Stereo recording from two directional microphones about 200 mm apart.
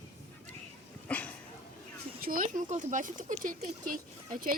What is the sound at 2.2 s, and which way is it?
Speech, 45° right (ahead or behind).